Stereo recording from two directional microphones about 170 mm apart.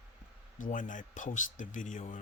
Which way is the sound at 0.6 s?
50° left (ahead or behind).